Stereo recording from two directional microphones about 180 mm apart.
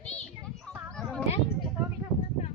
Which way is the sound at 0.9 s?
Centre (ahead or behind).